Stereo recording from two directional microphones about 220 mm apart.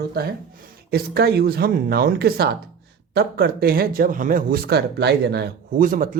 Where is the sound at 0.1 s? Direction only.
45° right (ahead or behind).